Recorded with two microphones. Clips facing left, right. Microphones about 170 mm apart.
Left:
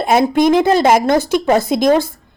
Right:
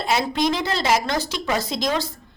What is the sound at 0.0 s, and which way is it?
A woman's voice, 50° left (ahead or behind).